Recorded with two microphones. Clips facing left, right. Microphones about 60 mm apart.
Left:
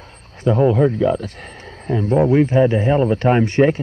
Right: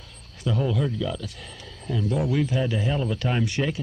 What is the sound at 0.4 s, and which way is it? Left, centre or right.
A man's voice, left.